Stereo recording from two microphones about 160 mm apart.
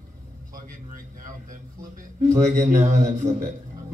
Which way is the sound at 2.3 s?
50° right (ahead or behind).